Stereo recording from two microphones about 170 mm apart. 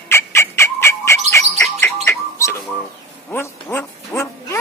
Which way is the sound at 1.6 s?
15° left (ahead or behind).